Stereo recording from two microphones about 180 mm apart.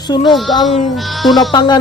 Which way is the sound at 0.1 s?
25° left (ahead or behind).